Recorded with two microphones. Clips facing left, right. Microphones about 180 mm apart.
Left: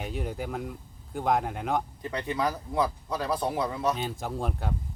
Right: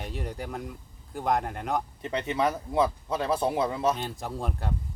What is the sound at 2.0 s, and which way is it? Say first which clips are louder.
Speech: right 5 dB; 25° right (ahead or behind).